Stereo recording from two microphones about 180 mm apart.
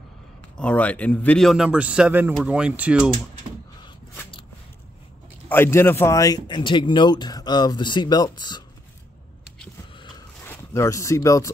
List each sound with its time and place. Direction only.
0.6 s a man's voice: 5° left (ahead or behind)
5.5 s speech: 15° left (ahead or behind)
9.9 s a sound: 25° left (ahead or behind)
10.4 s speech: 15° left (ahead or behind)